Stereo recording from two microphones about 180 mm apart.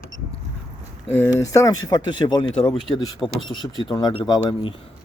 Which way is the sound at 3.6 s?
25° left (ahead or behind).